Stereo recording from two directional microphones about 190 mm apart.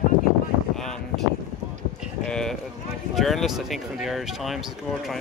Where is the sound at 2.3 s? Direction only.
5° left (ahead or behind).